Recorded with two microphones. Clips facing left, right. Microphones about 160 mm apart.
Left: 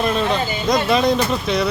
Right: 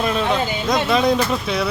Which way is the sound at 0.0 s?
Centre (ahead or behind).